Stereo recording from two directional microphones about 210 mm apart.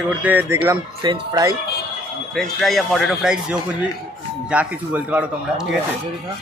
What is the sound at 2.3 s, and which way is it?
Speech, centre (ahead or behind).